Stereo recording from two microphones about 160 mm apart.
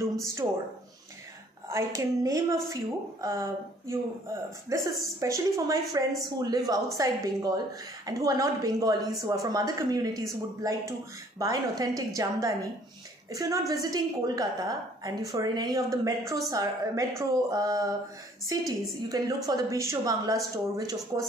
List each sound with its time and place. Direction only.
0.0 s a woman's voice: 20° right (ahead or behind)
1.7 s a woman's voice: 20° right (ahead or behind)